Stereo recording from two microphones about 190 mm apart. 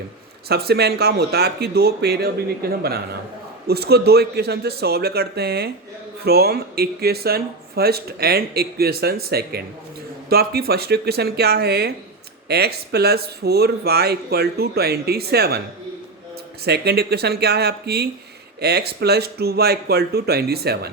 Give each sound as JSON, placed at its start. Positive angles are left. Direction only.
{"t": 0.4, "sound": "speech", "side_deg": -55}
{"t": 16.6, "sound": "speech", "side_deg": -60}